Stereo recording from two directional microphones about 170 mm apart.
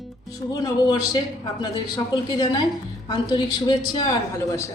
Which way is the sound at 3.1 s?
25° left (ahead or behind).